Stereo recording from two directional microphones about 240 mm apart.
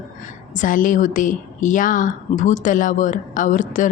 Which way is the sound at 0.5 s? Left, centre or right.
Left.